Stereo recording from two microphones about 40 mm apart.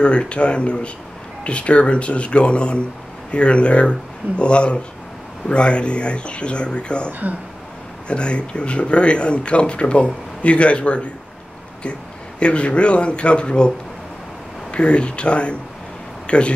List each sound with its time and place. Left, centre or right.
0.0 s speech: left
7.1 s speech: right
8.1 s speech: left
12.4 s speech: left